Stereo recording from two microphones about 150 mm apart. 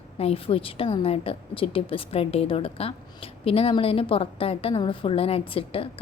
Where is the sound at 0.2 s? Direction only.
40° left (ahead or behind).